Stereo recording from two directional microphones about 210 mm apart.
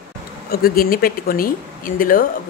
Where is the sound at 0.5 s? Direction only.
45° left (ahead or behind).